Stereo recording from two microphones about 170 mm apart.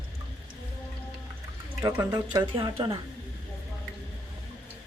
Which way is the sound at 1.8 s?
20° right (ahead or behind).